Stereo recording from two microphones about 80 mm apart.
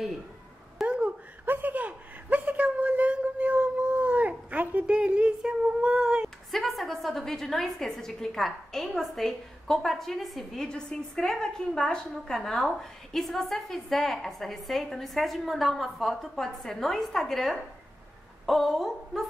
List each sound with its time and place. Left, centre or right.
0.8 s chuckle: centre
6.5 s a woman's voice: centre